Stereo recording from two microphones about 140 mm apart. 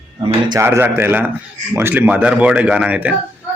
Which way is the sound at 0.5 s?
20° right (ahead or behind).